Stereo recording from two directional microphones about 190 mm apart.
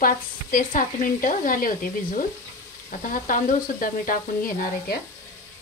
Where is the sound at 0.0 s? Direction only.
45° left (ahead or behind).